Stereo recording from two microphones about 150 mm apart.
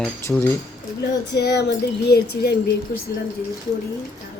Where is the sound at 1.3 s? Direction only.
90° left.